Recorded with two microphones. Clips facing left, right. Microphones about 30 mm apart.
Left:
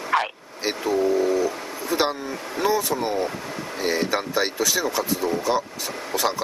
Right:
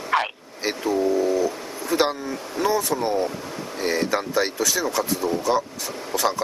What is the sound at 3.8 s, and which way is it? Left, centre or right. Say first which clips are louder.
Speech: even; centre.